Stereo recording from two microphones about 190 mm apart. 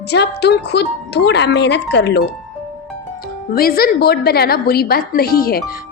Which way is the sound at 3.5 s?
50° left (ahead or behind).